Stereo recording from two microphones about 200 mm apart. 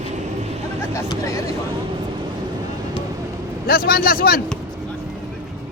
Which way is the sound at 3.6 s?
45° left (ahead or behind).